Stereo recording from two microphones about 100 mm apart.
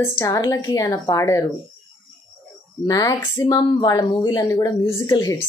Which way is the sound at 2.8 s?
35° left (ahead or behind).